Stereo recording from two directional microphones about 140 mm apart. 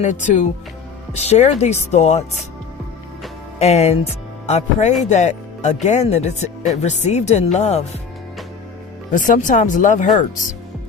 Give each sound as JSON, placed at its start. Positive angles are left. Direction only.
{"t": 0.0, "sound": "speech", "side_deg": 60}
{"t": 3.6, "sound": "speech", "side_deg": 50}
{"t": 9.1, "sound": "speech", "side_deg": 70}